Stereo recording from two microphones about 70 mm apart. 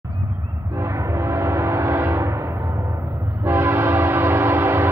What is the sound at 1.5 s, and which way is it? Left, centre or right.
Train, right.